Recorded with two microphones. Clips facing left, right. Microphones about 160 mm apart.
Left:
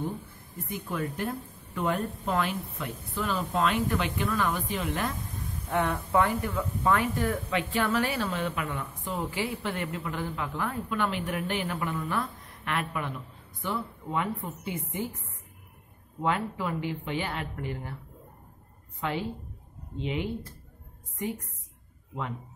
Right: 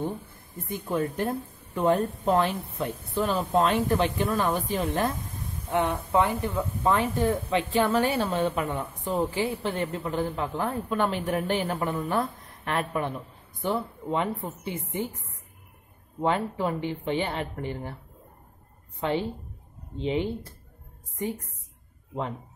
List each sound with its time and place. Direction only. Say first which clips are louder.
0.7 s speech: right 5 dB; 30° right (ahead or behind)
5.7 s speech: right 2 dB; 20° right (ahead or behind)
16.2 s speech: right 3 dB; 30° right (ahead or behind)
18.9 s a woman's voice: right 4 dB; 30° right (ahead or behind)